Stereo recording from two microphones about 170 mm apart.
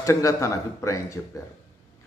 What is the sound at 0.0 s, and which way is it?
A man's voice, 20° left (ahead or behind).